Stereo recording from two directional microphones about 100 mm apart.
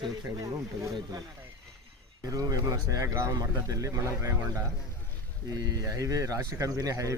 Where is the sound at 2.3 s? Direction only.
35° right (ahead or behind).